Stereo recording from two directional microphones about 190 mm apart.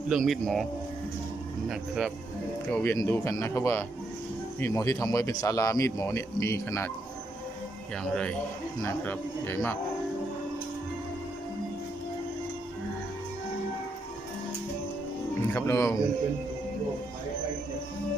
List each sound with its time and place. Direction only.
0.1 s speech: centre (ahead or behind)
1.7 s speech: centre (ahead or behind)
2.7 s speech: 10° left (ahead or behind)
8.0 s speech: 5° left (ahead or behind)
15.5 s speech: 15° left (ahead or behind)